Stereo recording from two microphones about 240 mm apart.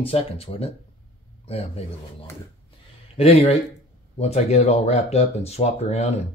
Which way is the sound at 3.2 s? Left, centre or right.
Left.